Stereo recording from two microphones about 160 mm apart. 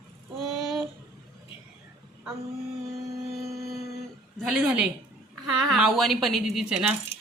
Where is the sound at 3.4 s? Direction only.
20° right (ahead or behind).